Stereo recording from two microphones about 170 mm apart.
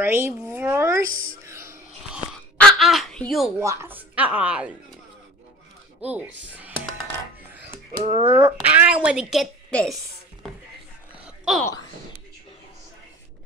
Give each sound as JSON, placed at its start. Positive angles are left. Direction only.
{"t": 0.0, "sound": "speech", "side_deg": -15}
{"t": 0.5, "sound": "a sound", "side_deg": -15}
{"t": 2.5, "sound": "speech", "side_deg": 0}
{"t": 3.6, "sound": "speech", "side_deg": -15}
{"t": 5.9, "sound": "speech", "side_deg": -5}
{"t": 8.0, "sound": "speech", "side_deg": -35}
{"t": 8.7, "sound": "a woman's voice", "side_deg": -5}
{"t": 11.2, "sound": "a sound", "side_deg": -5}